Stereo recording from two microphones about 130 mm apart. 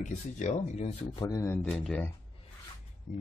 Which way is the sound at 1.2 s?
25° left (ahead or behind).